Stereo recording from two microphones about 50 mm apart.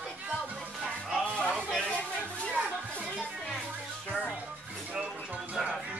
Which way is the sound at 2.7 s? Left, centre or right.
Left.